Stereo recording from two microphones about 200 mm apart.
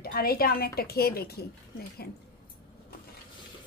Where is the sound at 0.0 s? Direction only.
50° left (ahead or behind).